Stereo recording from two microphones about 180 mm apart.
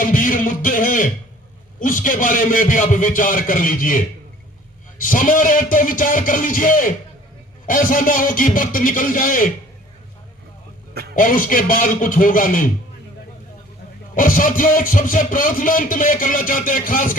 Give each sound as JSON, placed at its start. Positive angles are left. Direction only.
{"t": 0.0, "sound": "a sound", "side_deg": 50}
{"t": 1.8, "sound": "speech", "side_deg": 50}
{"t": 11.1, "sound": "speech", "side_deg": 50}
{"t": 14.2, "sound": "speech", "side_deg": 50}